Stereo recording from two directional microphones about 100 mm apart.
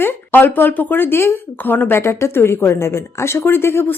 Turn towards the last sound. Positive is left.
turn(degrees=25)  # may be behind; listen again after turning